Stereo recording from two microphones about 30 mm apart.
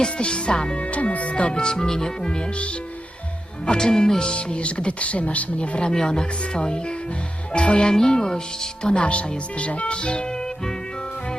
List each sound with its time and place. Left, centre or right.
0.2 s speech: left
0.8 s speech: left
1.5 s speech: left
3.7 s speech: left
4.3 s speech: left
5.5 s speech: left
5.9 s speech: left